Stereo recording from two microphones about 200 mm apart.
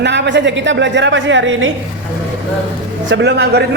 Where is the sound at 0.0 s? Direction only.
60° right (ahead or behind).